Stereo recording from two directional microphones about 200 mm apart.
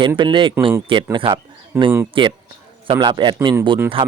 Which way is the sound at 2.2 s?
25° right (ahead or behind).